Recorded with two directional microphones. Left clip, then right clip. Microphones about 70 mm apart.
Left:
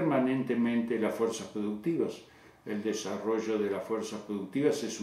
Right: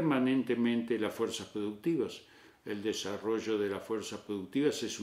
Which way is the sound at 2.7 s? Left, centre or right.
Right.